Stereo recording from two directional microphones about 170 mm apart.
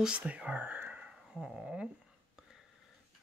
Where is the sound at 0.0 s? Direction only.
5° right (ahead or behind).